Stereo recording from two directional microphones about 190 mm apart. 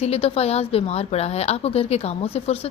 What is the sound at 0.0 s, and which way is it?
A woman's voice, 30° left (ahead or behind).